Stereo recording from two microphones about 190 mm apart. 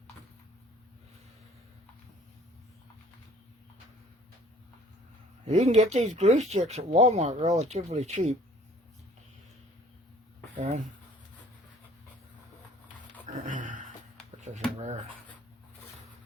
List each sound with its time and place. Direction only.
5.5 s speech: 35° right (ahead or behind)
10.6 s speech: 40° right (ahead or behind)
13.2 s dog: 40° right (ahead or behind)